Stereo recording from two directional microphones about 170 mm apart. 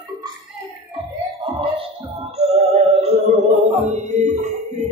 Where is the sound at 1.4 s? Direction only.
30° right (ahead or behind).